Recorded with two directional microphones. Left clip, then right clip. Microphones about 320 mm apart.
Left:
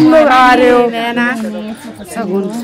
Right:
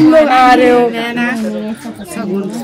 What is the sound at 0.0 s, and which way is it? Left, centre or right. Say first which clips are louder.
Speech: left 1 dB; centre.